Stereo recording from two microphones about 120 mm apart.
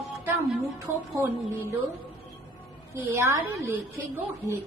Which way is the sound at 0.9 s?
20° right (ahead or behind).